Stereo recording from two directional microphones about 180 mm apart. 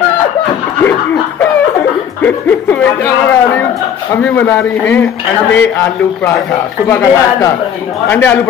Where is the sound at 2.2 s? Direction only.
10° left (ahead or behind).